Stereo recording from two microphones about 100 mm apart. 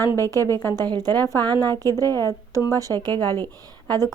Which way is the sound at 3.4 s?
40° right (ahead or behind).